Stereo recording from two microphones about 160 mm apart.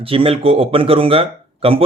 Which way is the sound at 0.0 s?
35° right (ahead or behind).